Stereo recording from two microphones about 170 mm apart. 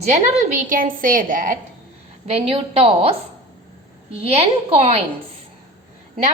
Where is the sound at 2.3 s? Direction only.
40° right (ahead or behind).